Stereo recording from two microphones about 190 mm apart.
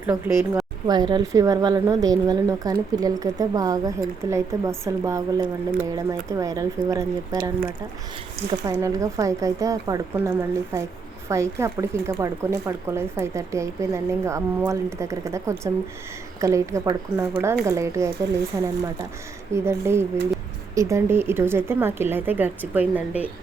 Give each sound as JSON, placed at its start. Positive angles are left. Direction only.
{"t": 0.0, "sound": "speech", "side_deg": -15}
{"t": 8.4, "sound": "speech", "side_deg": -20}